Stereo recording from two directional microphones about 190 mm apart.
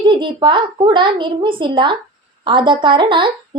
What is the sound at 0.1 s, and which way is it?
A woman's voice, 25° right (ahead or behind).